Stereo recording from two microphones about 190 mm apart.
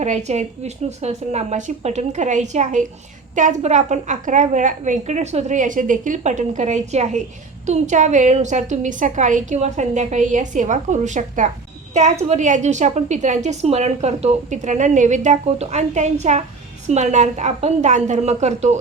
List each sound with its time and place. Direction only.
0.0 s a woman's voice: 35° right (ahead or behind)